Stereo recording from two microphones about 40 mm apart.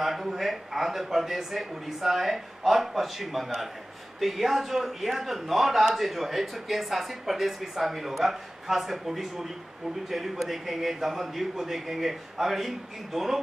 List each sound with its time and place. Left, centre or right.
0.0 s a man's voice: centre